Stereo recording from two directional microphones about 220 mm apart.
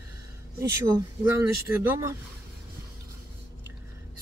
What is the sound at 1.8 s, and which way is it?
Speech, 15° right (ahead or behind).